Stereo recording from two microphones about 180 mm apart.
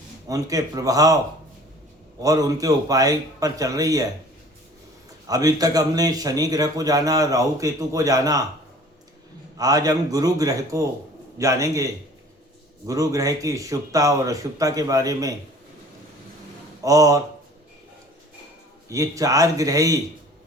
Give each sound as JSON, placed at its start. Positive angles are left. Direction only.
{"t": 0.3, "sound": "a man's voice", "side_deg": -20}
{"t": 2.2, "sound": "a man's voice", "side_deg": -20}
{"t": 5.3, "sound": "a man's voice", "side_deg": -20}
{"t": 9.6, "sound": "a man's voice", "side_deg": -20}
{"t": 12.9, "sound": "a man's voice", "side_deg": -20}
{"t": 16.8, "sound": "a man's voice", "side_deg": -20}
{"t": 18.9, "sound": "a man's voice", "side_deg": -15}